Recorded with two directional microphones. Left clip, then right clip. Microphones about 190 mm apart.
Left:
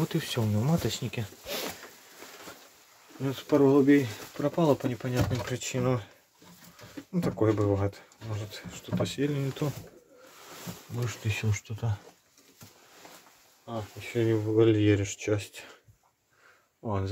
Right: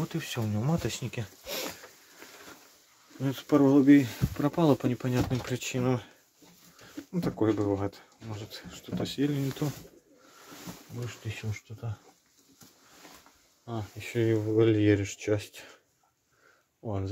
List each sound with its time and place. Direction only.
0.1 s speech: 5° left (ahead or behind)
0.6 s speech: 5° right (ahead or behind)
3.3 s speech: 25° right (ahead or behind)
5.6 s speech: 15° right (ahead or behind)
7.1 s speech: 15° right (ahead or behind)
11.0 s speech: 25° left (ahead or behind)
13.7 s speech: 25° right (ahead or behind); by 15.7 s 10° right (ahead or behind)
16.8 s speech: 5° right (ahead or behind)